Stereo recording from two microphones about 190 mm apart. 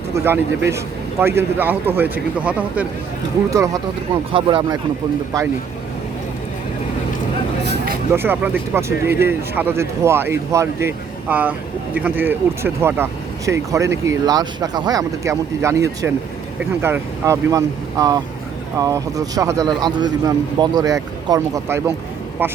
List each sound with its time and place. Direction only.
1.2 s a man's voice: 10° right (ahead or behind)
7.6 s a sound: 60° right (ahead or behind)
8.1 s a man's voice: 10° right (ahead or behind)